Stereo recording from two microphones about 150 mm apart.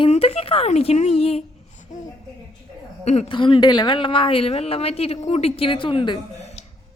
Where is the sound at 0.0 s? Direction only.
40° left (ahead or behind).